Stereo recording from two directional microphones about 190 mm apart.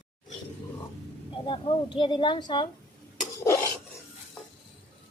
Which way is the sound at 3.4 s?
15° left (ahead or behind).